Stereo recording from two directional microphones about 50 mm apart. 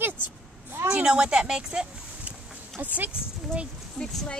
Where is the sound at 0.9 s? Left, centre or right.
Centre.